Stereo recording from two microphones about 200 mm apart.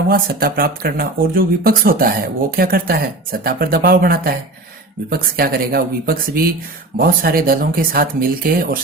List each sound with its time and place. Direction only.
0.1 s speech: 45° right (ahead or behind)